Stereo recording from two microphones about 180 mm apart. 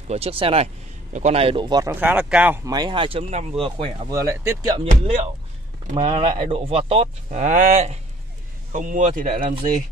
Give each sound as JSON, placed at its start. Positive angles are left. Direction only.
{"t": 0.1, "sound": "speech", "side_deg": -30}
{"t": 1.9, "sound": "speech", "side_deg": -10}
{"t": 2.7, "sound": "speech", "side_deg": -25}
{"t": 4.2, "sound": "speech", "side_deg": -15}
{"t": 4.8, "sound": "speech", "side_deg": -40}
{"t": 5.9, "sound": "a man's voice", "side_deg": -25}